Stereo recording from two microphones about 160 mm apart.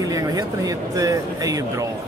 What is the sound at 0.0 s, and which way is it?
Speech, 20° right (ahead or behind).